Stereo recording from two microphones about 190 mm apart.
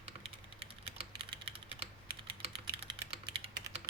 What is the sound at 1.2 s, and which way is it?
Typing, 30° right (ahead or behind).